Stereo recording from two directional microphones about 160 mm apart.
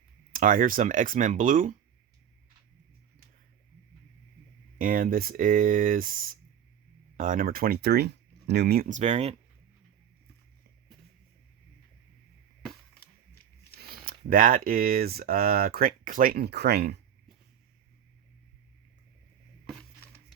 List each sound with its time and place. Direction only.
0.3 s speech: 55° right (ahead or behind)
4.8 s speech: 60° right (ahead or behind); by 8.9 s 80° right
8.9 s speech: 45° right (ahead or behind)
13.7 s speech: 70° right (ahead or behind); by 17.0 s 85° right